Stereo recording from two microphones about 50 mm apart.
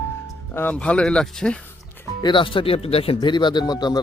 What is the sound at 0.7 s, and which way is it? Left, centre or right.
Speech, left.